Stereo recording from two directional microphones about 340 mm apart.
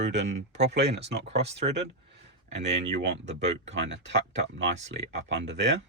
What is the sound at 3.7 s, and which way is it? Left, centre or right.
Speech, right.